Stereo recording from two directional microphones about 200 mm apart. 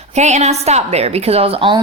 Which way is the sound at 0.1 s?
35° right (ahead or behind).